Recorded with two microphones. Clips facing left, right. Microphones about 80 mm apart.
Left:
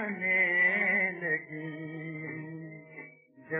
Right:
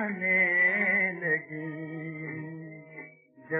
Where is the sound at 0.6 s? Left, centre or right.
Right.